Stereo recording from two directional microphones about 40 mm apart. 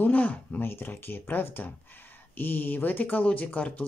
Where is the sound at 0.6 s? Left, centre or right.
Left.